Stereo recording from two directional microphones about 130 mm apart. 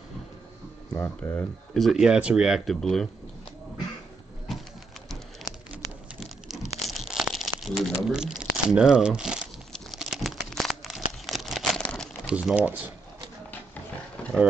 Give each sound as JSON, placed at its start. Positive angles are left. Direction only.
{"t": 0.9, "sound": "speech", "side_deg": 20}
{"t": 1.7, "sound": "speech", "side_deg": 0}
{"t": 5.4, "sound": "crumpling", "side_deg": 0}
{"t": 7.9, "sound": "a sound", "side_deg": -5}
{"t": 8.4, "sound": "speech", "side_deg": -5}
{"t": 9.7, "sound": "crumpling", "side_deg": 0}
{"t": 12.3, "sound": "speech", "side_deg": -10}